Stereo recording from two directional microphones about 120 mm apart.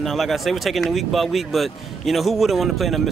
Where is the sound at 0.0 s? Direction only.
Centre (ahead or behind).